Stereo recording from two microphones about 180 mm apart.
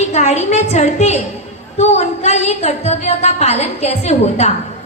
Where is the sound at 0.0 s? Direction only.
40° left (ahead or behind).